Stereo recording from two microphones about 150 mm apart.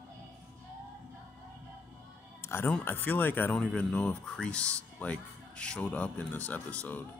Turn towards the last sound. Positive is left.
turn(degrees=10)  # may be behind; listen again after turning